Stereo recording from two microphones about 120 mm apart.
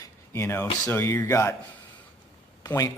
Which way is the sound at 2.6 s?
30° left (ahead or behind).